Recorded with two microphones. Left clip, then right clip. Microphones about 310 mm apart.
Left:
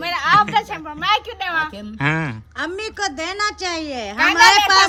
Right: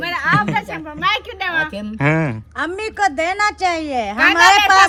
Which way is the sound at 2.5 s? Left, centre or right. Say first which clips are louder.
Right 4 dB; right.